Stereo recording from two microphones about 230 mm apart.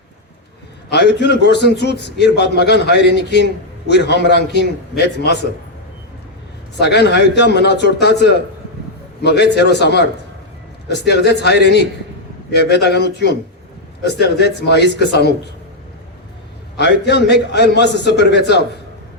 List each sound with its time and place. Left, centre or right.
0.9 s a man's voice: left
6.7 s a man's voice: left
16.7 s a man's voice: left